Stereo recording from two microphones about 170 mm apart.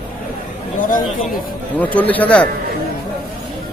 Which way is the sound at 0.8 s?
55° left (ahead or behind).